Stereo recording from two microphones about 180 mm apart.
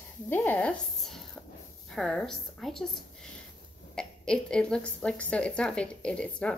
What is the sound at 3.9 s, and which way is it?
A woman's voice, 5° left (ahead or behind).